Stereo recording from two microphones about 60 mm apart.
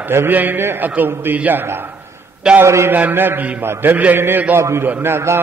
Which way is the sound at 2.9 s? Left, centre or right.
Right.